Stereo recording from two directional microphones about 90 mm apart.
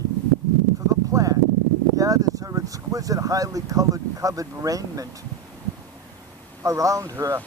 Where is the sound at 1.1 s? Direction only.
40° right (ahead or behind).